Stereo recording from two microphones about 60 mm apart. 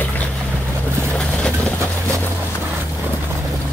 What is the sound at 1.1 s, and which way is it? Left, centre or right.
Vehicle, left.